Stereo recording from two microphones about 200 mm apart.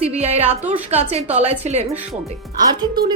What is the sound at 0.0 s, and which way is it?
A woman's voice, 30° right (ahead or behind).